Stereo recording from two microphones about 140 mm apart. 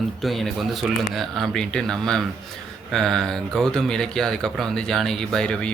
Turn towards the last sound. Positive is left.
turn(degrees=5)  # may be behind; listen again after turning